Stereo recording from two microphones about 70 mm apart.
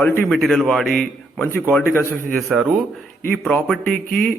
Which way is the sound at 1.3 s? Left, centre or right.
Left.